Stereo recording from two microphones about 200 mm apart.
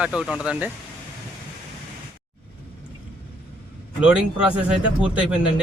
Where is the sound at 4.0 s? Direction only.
5° right (ahead or behind).